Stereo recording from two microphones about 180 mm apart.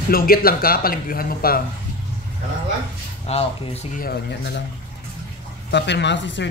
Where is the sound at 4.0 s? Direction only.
65° left (ahead or behind).